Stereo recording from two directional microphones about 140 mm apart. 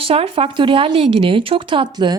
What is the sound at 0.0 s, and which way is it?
Speech, 40° right (ahead or behind).